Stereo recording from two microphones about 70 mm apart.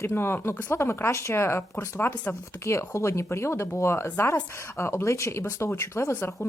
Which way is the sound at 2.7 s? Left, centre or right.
Left.